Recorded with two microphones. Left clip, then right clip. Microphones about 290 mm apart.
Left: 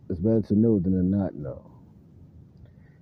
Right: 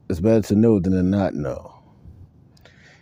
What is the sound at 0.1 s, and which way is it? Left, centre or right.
Speech, right.